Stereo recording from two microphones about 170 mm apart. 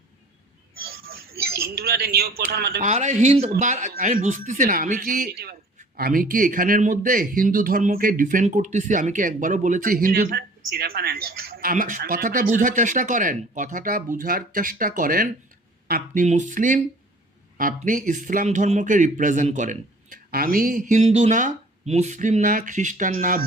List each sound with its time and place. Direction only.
0.9 s a sound: 60° right (ahead or behind)
2.8 s speech: 45° right (ahead or behind)
20.3 s speech: 60° right (ahead or behind)